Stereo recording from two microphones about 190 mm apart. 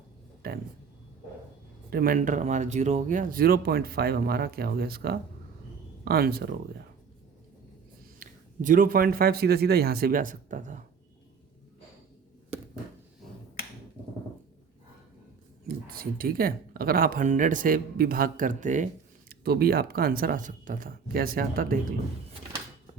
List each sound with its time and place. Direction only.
0.4 s speech: 50° right (ahead or behind)
1.9 s speech: 50° right (ahead or behind)
8.2 s a man's voice: 45° right (ahead or behind)
15.6 s speech: 50° right (ahead or behind)
19.3 s speech: 55° right (ahead or behind)